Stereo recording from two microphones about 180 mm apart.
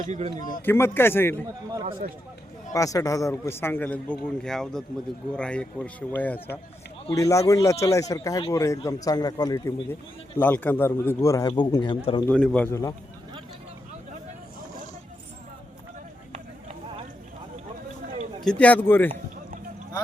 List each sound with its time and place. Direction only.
0.0 s speech: 40° right (ahead or behind)
0.6 s a man's voice: 10° left (ahead or behind)
2.7 s a man's voice: 20° left (ahead or behind)
12.3 s a man's voice: 5° left (ahead or behind)
18.4 s a man's voice: 5° left (ahead or behind)